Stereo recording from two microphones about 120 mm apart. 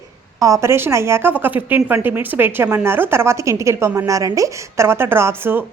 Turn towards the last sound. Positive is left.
turn(degrees=-20)  # may be behind; listen again after turning